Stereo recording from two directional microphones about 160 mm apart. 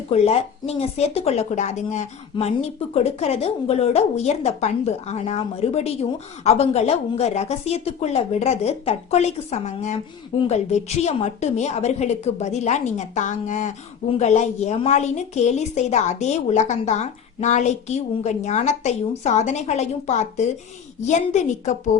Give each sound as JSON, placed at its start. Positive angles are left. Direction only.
{"t": 0.1, "sound": "a woman's voice", "side_deg": 40}